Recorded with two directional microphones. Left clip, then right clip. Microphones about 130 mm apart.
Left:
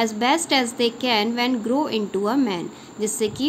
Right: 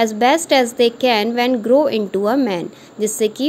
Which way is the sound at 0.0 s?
40° right (ahead or behind).